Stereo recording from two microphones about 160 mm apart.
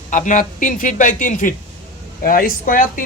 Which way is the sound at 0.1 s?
50° left (ahead or behind).